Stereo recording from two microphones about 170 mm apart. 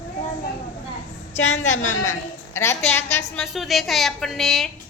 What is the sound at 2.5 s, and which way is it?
Speech, 15° left (ahead or behind).